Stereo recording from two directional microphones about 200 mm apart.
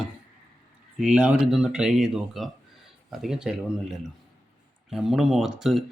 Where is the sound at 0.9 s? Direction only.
5° right (ahead or behind).